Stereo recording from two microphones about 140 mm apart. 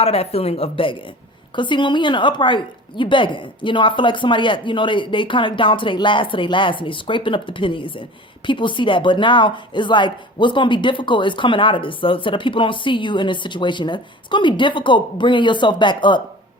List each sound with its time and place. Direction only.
0.0 s speech: 45° left (ahead or behind)